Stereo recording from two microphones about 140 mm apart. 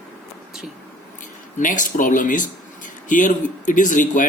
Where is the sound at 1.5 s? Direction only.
65° left (ahead or behind).